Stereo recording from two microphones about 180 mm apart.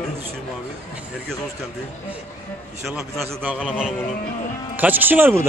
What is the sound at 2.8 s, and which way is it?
A man's voice, centre (ahead or behind).